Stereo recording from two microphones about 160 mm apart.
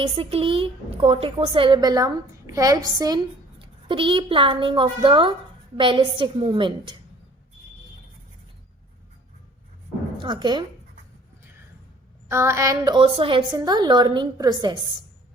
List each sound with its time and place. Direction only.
0.0 s a woman's voice: 35° right (ahead or behind)
10.2 s a woman's voice: 30° right (ahead or behind)
12.3 s a woman's voice: 15° right (ahead or behind)